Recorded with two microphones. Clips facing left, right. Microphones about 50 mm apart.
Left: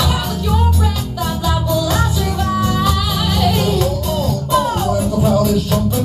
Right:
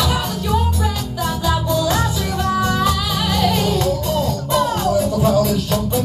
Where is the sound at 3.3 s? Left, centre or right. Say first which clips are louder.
Left 1 dB; left.